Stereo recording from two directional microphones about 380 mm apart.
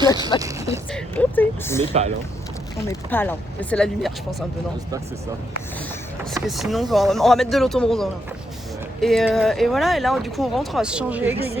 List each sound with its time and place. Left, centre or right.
0.0 s speech: centre
0.9 s speech: centre
1.9 s speech: centre
3.1 s speech: centre
6.3 s speech: centre